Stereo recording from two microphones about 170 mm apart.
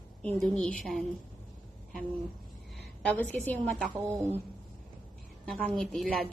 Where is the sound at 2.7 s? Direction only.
10° left (ahead or behind).